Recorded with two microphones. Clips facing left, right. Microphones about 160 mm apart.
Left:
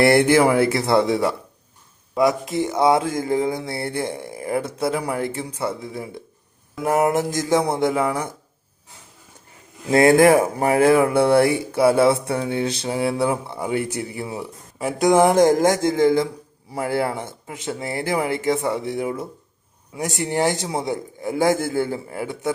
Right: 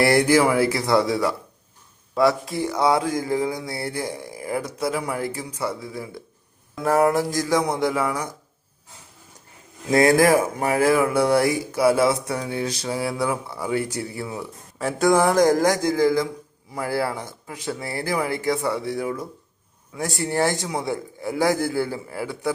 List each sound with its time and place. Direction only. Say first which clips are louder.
0.0 s speech: left 2 dB; 25° left (ahead or behind)
9.9 s speech: left 3 dB; 25° left (ahead or behind)